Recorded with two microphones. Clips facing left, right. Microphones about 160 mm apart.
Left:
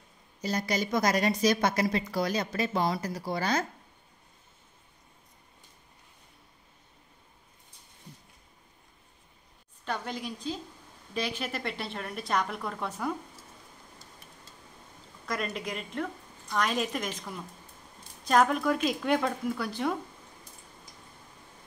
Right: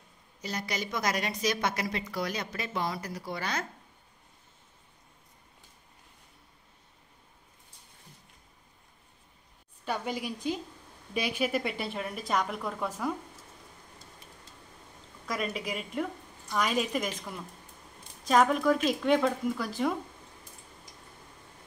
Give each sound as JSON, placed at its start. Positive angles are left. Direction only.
{"t": 0.4, "sound": "a woman's voice", "side_deg": 40}
{"t": 9.8, "sound": "a woman's voice", "side_deg": -10}
{"t": 15.2, "sound": "a woman's voice", "side_deg": -5}